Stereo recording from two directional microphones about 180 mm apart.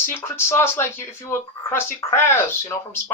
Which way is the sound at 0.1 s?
15° left (ahead or behind).